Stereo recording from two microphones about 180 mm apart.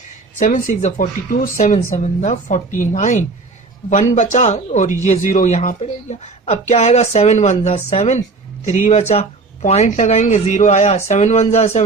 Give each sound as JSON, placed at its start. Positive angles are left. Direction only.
{"t": 0.3, "sound": "speech", "side_deg": 45}